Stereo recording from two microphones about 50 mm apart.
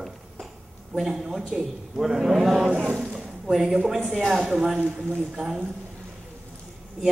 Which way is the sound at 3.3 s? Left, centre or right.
Centre.